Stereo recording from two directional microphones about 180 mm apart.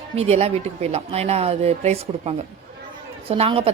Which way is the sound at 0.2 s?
35° right (ahead or behind).